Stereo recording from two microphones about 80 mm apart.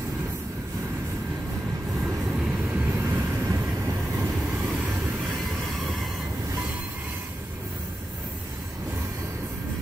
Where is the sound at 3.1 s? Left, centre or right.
Right.